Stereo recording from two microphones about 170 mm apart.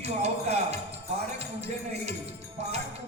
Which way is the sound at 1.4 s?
40° right (ahead or behind).